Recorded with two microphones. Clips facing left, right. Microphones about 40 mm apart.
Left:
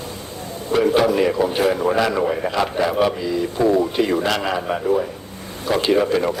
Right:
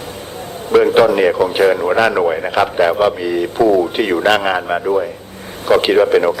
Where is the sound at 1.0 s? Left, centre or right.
Right.